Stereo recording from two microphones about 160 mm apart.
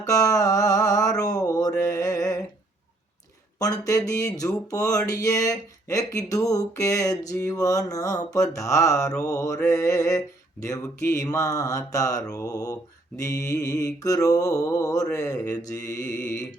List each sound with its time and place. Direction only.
0.0 s music: 20° left (ahead or behind)
1.2 s mantra: 25° left (ahead or behind)
3.6 s speech: 20° left (ahead or behind)
15.4 s mantra: 15° left (ahead or behind)